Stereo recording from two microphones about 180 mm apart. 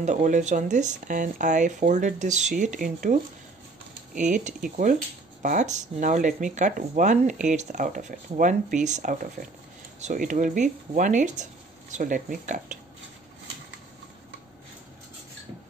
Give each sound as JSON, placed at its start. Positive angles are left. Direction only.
{"t": 0.0, "sound": "speech", "side_deg": -45}